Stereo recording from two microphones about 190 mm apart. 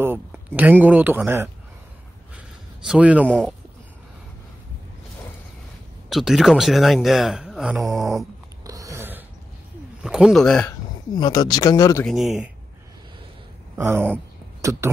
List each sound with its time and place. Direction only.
0.0 s speech: 10° right (ahead or behind)
2.9 s speech: 5° right (ahead or behind)
6.0 s speech: centre (ahead or behind)
8.6 s a sound: 15° right (ahead or behind)
10.0 s speech: 5° right (ahead or behind)
11.1 s speech: 20° left (ahead or behind)
12.0 s speech: centre (ahead or behind)
13.7 s speech: 10° right (ahead or behind)